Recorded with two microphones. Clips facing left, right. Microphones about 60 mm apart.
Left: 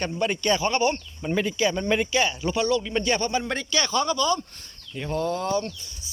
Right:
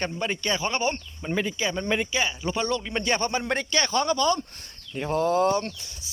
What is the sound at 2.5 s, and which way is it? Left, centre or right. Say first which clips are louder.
Speech: left 4 dB; right.